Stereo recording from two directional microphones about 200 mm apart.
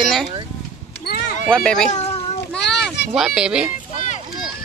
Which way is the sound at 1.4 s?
5° left (ahead or behind).